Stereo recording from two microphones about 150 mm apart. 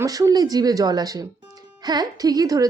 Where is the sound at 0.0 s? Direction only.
25° right (ahead or behind).